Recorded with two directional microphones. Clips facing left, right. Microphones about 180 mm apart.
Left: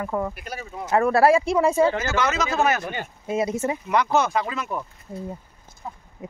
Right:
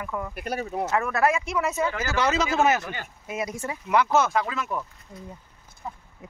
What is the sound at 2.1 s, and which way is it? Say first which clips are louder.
Speech: even; 30° right (ahead or behind).